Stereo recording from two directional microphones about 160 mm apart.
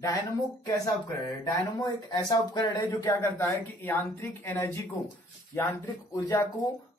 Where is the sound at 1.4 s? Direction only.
25° left (ahead or behind).